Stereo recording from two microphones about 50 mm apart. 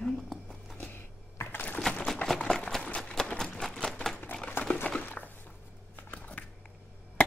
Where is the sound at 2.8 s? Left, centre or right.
Left.